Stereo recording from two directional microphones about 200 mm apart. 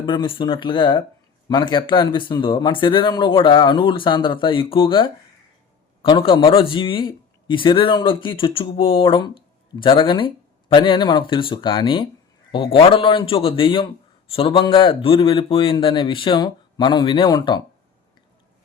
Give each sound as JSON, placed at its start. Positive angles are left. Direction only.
{"t": 0.0, "sound": "speech", "side_deg": 25}